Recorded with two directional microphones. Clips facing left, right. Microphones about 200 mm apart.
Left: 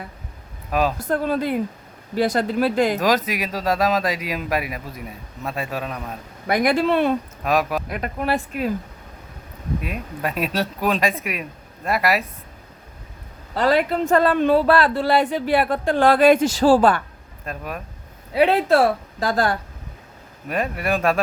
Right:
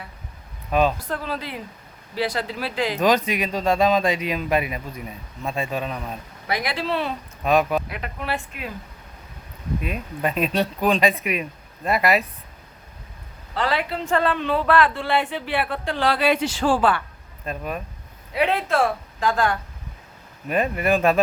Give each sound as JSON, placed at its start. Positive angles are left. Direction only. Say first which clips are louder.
{"t": 0.7, "sound": "speech", "louder": "right 1 dB", "side_deg": 5}
{"t": 0.9, "sound": "speech", "louder": "left 7 dB", "side_deg": 45}
{"t": 3.0, "sound": "speech", "louder": "right 1 dB", "side_deg": 0}
{"t": 6.5, "sound": "speech", "louder": "left 7 dB", "side_deg": 50}
{"t": 7.4, "sound": "speech", "louder": "right 3 dB", "side_deg": 0}
{"t": 7.9, "sound": "speech", "louder": "left 5 dB", "side_deg": 45}
{"t": 9.8, "sound": "speech", "louder": "right 5 dB", "side_deg": 5}
{"t": 13.5, "sound": "speech", "louder": "left 6 dB", "side_deg": 40}
{"t": 17.4, "sound": "speech", "louder": "right 2 dB", "side_deg": 0}
{"t": 18.3, "sound": "speech", "louder": "left 5 dB", "side_deg": 35}
{"t": 20.5, "sound": "speech", "louder": "right 2 dB", "side_deg": 0}